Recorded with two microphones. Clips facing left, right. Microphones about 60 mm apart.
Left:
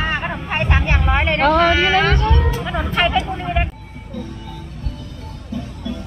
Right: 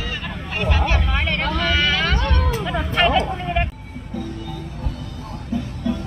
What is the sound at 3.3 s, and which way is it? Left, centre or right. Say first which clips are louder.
Vehicle: left 1 dB; centre.